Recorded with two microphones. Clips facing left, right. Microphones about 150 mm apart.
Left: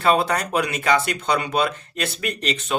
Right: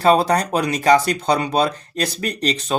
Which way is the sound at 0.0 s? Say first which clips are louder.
Right 4 dB; 35° right (ahead or behind).